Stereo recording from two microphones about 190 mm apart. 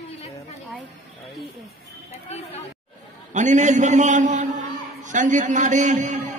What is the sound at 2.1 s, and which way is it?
Speech, 35° left (ahead or behind).